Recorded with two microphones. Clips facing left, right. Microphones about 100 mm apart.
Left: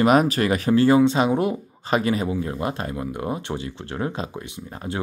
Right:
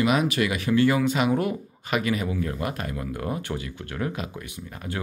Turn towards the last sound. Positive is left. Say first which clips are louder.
# left 4 dB
turn(degrees=30)  # may be behind; listen again after turning